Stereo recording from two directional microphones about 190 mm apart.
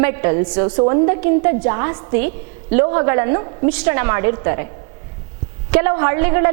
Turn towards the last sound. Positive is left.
turn(degrees=-15)  # may be behind; listen again after turning